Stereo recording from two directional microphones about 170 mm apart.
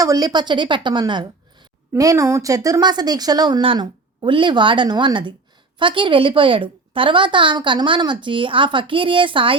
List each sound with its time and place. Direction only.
0.0 s a woman's voice: 20° right (ahead or behind)